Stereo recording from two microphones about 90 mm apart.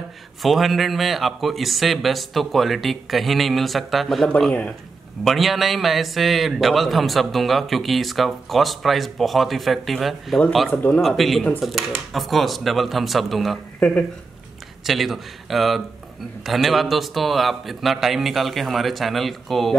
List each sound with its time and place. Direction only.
0.4 s speech: centre (ahead or behind)
10.7 s speech: 20° left (ahead or behind)
11.0 s speech: centre (ahead or behind)
14.9 s speech: centre (ahead or behind)